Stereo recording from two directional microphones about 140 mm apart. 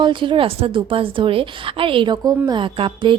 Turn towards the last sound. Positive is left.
turn(degrees=-35)  # may be behind; listen again after turning